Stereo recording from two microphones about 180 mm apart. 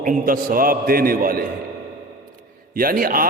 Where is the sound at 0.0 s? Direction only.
50° right (ahead or behind).